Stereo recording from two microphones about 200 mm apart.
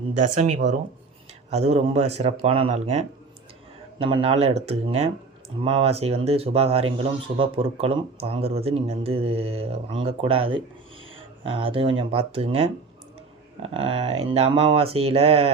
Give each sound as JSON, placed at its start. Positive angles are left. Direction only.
{"t": 0.2, "sound": "speech", "side_deg": -35}